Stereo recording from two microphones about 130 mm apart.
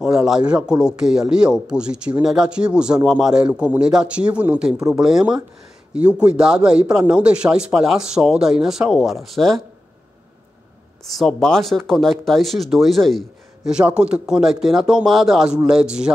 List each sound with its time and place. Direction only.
0.0 s a sound: 5° right (ahead or behind)
0.5 s speech: 5° right (ahead or behind)
4.7 s speech: 25° right (ahead or behind)
5.0 s speech: 5° right (ahead or behind)
11.1 s speech: centre (ahead or behind)